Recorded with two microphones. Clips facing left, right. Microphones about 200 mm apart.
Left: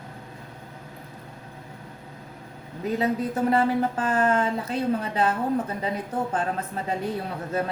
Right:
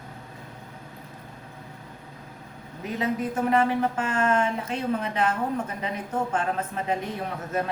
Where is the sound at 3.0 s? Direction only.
35° left (ahead or behind).